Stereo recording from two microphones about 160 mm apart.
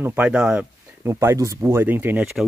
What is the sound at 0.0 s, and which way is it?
Speech, 10° right (ahead or behind).